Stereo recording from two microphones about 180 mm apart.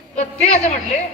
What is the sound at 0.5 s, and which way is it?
Speech, 40° left (ahead or behind).